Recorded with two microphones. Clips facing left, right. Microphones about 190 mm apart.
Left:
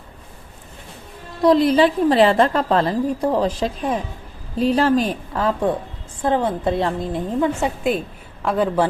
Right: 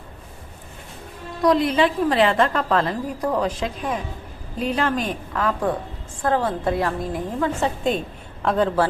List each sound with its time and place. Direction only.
1.4 s a woman's voice: 35° left (ahead or behind)
7.9 s a woman's voice: 5° left (ahead or behind)